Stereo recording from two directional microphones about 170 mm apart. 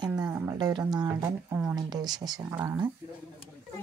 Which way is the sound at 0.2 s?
15° right (ahead or behind).